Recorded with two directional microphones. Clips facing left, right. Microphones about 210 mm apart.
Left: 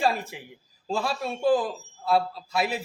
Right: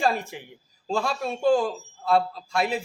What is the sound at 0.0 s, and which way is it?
A man's voice, centre (ahead or behind).